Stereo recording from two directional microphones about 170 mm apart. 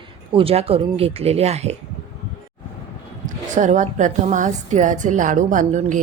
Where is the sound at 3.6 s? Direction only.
45° right (ahead or behind).